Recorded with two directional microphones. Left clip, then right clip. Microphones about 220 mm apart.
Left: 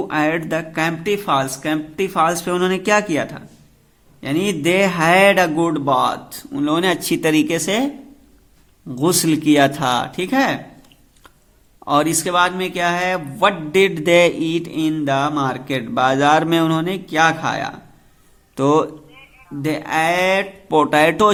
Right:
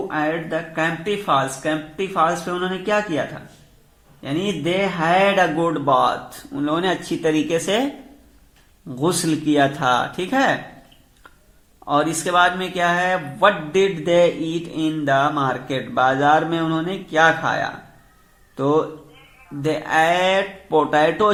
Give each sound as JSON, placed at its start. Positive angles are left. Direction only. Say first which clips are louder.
{"t": 0.1, "sound": "speech", "louder": "left 4 dB", "side_deg": 40}
{"t": 9.0, "sound": "speech", "louder": "left 3 dB", "side_deg": 20}
{"t": 11.9, "sound": "a man's voice", "louder": "left 2 dB", "side_deg": 25}